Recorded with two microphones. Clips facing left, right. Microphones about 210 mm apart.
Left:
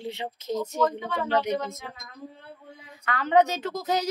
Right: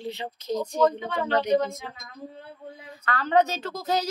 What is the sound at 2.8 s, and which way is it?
A woman's voice, 15° left (ahead or behind).